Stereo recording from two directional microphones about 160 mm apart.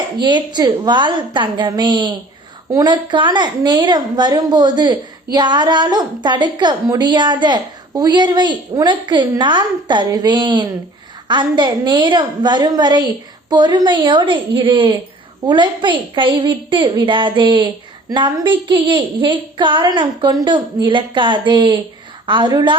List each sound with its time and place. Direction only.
0.2 s a woman's voice: 30° right (ahead or behind)